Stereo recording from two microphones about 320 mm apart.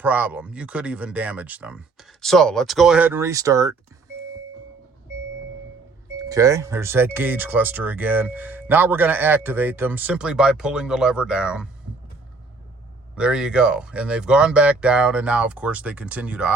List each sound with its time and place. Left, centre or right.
0.0 s speech: centre
6.1 s speech: centre
13.1 s speech: centre